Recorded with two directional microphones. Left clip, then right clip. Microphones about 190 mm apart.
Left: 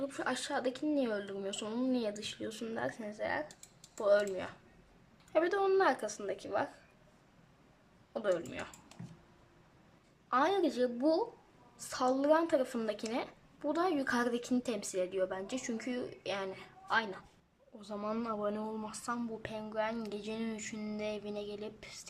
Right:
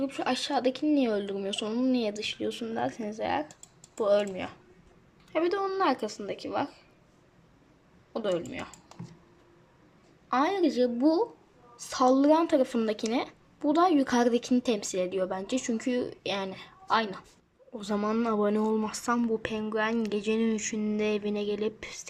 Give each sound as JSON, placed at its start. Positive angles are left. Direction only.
{"t": 0.0, "sound": "speech", "side_deg": -10}
{"t": 8.1, "sound": "speech", "side_deg": -10}
{"t": 10.2, "sound": "speech", "side_deg": -5}
{"t": 18.3, "sound": "speech", "side_deg": -15}